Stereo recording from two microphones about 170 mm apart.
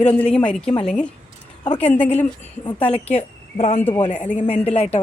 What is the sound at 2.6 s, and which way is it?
A woman's voice, 35° left (ahead or behind).